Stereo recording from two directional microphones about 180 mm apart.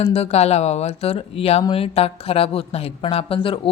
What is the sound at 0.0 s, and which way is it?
Speech, 35° left (ahead or behind).